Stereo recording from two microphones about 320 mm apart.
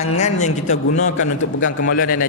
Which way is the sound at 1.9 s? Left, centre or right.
Left.